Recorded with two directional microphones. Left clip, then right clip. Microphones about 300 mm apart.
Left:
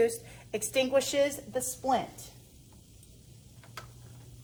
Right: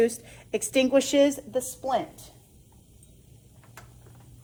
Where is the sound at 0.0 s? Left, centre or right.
Right.